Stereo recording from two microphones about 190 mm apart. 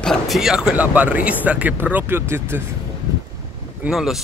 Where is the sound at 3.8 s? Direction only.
Centre (ahead or behind).